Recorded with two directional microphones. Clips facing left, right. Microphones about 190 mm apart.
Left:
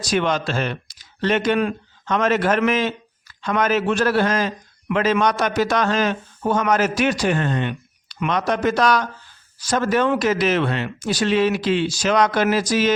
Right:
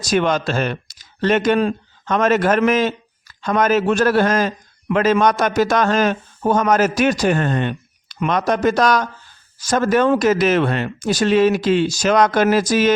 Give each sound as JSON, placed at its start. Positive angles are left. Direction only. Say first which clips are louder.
{"t": 0.0, "sound": "speech", "louder": "right 3 dB", "side_deg": -45}